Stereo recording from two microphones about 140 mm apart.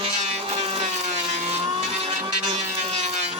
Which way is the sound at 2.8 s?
50° right (ahead or behind).